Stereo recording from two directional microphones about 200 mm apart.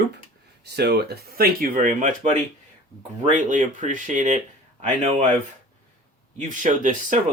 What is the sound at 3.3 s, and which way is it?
Speech, 40° right (ahead or behind).